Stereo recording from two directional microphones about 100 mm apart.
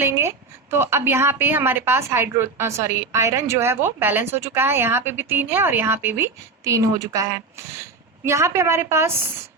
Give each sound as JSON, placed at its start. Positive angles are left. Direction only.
{"t": 0.0, "sound": "a woman's voice", "side_deg": -25}